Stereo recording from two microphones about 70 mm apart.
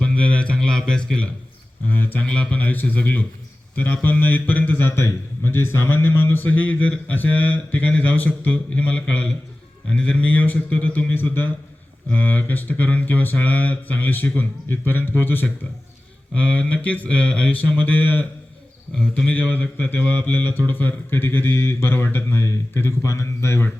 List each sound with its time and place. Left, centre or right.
0.0 s a sound: centre
1.9 s speech: left
2.2 s a man's voice: centre
16.3 s a man's voice: centre
18.9 s speech: centre
19.3 s speech: left